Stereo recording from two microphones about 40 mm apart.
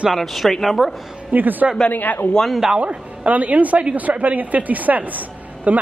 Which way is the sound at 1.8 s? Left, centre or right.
Left.